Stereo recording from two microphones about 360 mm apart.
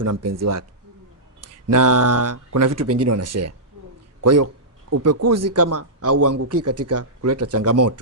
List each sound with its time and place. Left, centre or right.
0.0 s speech: right
1.6 s a man's voice: right